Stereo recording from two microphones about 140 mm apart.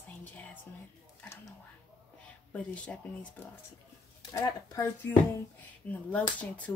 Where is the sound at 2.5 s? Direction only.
10° left (ahead or behind).